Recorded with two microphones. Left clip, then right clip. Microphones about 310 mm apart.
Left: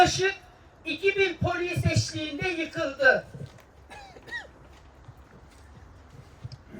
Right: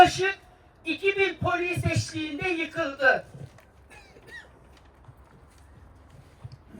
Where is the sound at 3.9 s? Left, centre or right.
Centre.